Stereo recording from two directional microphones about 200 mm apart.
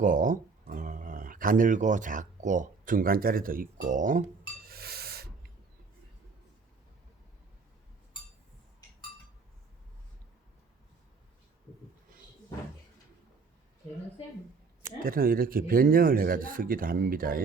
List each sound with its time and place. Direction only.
0.0 s speech: 40° right (ahead or behind)
3.8 s a sound: 40° right (ahead or behind)
15.0 s speech: 45° right (ahead or behind)